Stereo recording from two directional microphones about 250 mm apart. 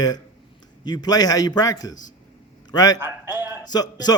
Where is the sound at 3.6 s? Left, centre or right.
Centre.